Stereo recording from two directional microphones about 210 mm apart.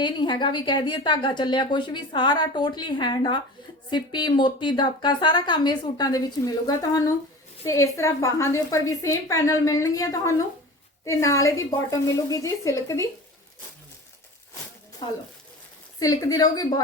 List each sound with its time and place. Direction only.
0.0 s a woman's voice: 20° left (ahead or behind)
16.0 s a woman's voice: 15° left (ahead or behind)